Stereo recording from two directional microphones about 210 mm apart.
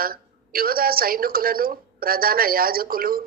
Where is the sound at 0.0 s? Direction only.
45° right (ahead or behind).